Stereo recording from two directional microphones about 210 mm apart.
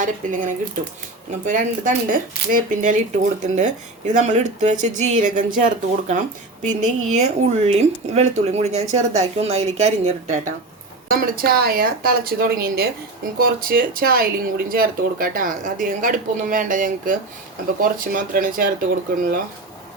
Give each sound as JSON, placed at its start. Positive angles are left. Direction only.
{"t": 0.0, "sound": "speech", "side_deg": -40}
{"t": 11.1, "sound": "speech", "side_deg": -45}